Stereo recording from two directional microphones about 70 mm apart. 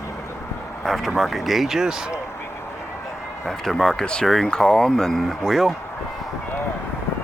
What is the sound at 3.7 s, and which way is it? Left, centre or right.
Speech, centre.